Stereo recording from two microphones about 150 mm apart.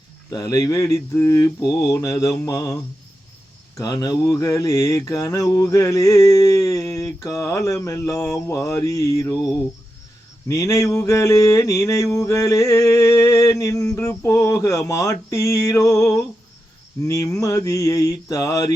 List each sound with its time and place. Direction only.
0.3 s mantra: 25° left (ahead or behind)
3.8 s mantra: 25° left (ahead or behind)
10.5 s mantra: 20° left (ahead or behind)